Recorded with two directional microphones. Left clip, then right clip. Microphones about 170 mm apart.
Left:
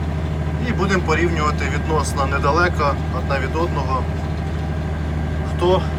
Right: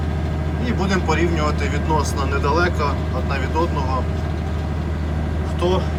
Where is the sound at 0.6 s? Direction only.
10° right (ahead or behind).